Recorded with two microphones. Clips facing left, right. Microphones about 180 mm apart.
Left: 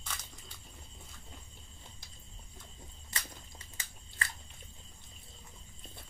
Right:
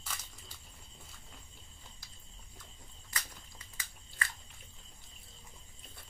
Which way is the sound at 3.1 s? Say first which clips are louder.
Left 1 dB; 25° left (ahead or behind).